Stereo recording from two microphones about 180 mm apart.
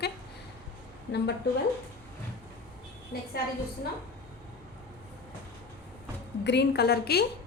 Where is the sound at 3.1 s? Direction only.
60° left (ahead or behind).